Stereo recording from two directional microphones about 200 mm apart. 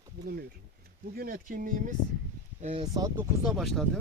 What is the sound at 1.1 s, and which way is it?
Speech, 45° right (ahead or behind).